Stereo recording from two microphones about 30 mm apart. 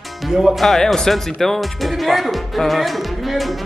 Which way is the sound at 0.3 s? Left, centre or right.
Centre.